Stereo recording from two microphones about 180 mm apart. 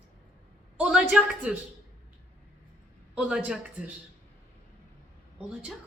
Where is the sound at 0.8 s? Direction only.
5° right (ahead or behind).